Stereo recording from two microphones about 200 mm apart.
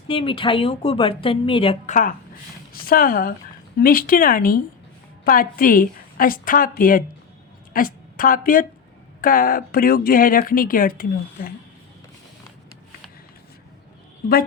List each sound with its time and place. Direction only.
0.1 s speech: 25° left (ahead or behind)
2.8 s a woman's voice: 45° left (ahead or behind)